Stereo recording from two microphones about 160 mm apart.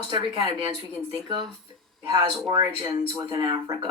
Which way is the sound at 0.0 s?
30° right (ahead or behind).